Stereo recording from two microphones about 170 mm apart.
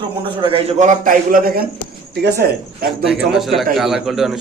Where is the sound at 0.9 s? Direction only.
55° right (ahead or behind).